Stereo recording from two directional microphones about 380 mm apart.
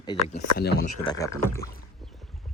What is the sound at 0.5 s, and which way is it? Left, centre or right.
Speech, left.